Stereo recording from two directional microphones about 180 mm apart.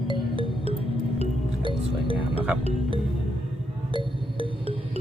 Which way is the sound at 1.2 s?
30° right (ahead or behind).